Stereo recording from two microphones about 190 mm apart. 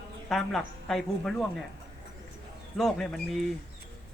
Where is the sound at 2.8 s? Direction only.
Centre (ahead or behind).